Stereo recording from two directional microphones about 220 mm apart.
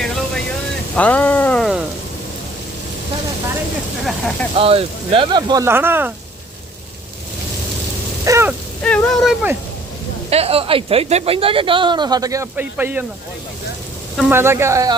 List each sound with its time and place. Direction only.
0.9 s speech: 5° left (ahead or behind)
4.0 s speech: centre (ahead or behind)
4.5 s speech: 25° right (ahead or behind); by 6.1 s 10° right (ahead or behind)
8.2 s a sound: 10° right (ahead or behind)
8.8 s speech: 5° left (ahead or behind)
10.2 s speech: 25° right (ahead or behind); by 13.1 s 10° right (ahead or behind)
14.2 s speech: 10° right (ahead or behind)